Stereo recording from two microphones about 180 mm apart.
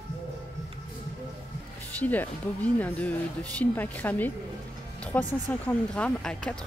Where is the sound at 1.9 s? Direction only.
10° left (ahead or behind).